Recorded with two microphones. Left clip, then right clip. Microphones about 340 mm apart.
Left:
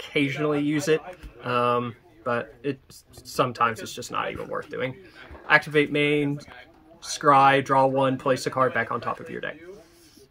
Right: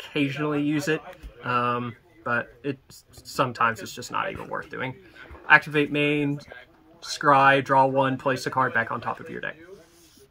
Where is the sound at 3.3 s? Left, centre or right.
Centre.